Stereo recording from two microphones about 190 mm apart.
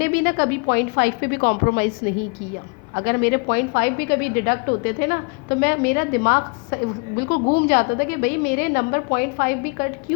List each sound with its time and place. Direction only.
0.0 s a woman's voice: 55° left (ahead or behind)